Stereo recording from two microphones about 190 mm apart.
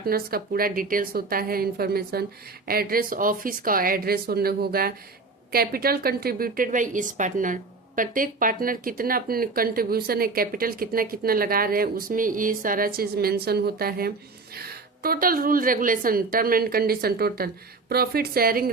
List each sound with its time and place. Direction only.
0.0 s a woman's voice: 50° right (ahead or behind)